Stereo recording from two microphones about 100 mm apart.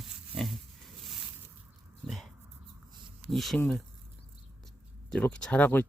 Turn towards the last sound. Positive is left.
turn(degrees=15)  # may be behind; listen again after turning